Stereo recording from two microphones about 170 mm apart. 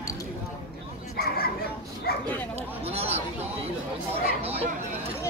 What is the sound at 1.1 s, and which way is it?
Chatter, 65° left (ahead or behind).